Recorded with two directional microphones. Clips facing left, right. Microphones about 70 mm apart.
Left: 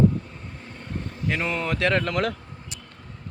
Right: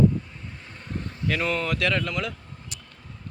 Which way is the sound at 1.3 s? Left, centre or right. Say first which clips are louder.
Right 1 dB; left.